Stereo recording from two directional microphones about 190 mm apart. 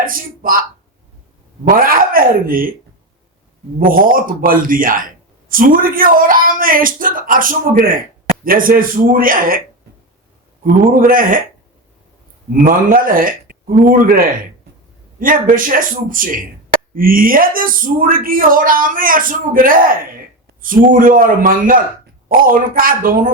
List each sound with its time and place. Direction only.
0.0 s a man's voice: 45° right (ahead or behind)
1.6 s a man's voice: 50° right (ahead or behind)
3.8 s a man's voice: 45° right (ahead or behind)
11.0 s a man's voice: 45° right (ahead or behind)
12.6 s a man's voice: 45° right (ahead or behind)